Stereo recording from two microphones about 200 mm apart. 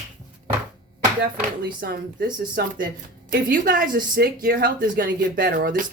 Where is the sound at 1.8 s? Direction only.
50° right (ahead or behind).